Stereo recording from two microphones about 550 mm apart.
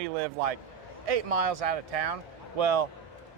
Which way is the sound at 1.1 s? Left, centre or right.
Right.